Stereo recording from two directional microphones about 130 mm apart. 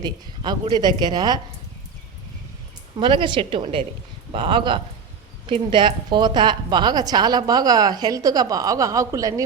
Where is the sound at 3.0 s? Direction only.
40° right (ahead or behind).